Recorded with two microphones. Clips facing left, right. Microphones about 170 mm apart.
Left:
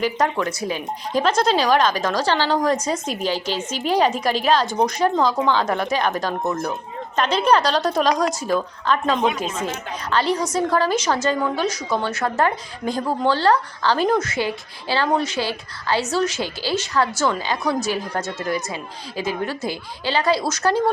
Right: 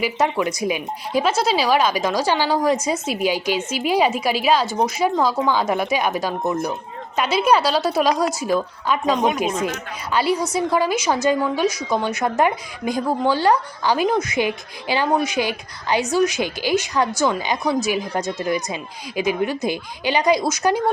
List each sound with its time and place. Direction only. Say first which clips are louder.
0.0 s a woman's voice: right 1 dB; 10° right (ahead or behind)